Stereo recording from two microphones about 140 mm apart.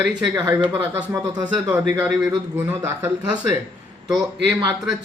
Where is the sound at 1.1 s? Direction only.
30° right (ahead or behind).